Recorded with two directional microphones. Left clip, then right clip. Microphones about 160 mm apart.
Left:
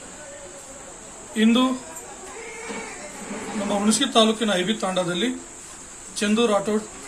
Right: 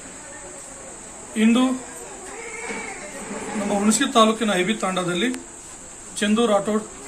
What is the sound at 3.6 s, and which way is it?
Speech, 5° right (ahead or behind).